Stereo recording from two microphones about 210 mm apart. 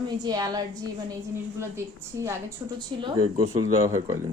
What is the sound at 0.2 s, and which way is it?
A woman's voice, 20° right (ahead or behind).